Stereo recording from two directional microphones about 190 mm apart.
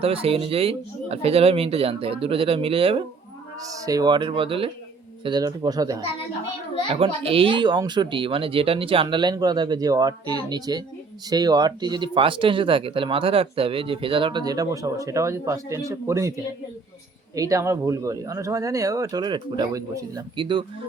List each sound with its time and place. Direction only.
0.0 s speech: 30° right (ahead or behind)
3.6 s speech: 20° right (ahead or behind)
6.9 s speech: 30° right (ahead or behind)
17.3 s speech: 15° right (ahead or behind)